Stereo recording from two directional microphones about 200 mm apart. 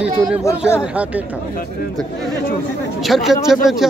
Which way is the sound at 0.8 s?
5° right (ahead or behind).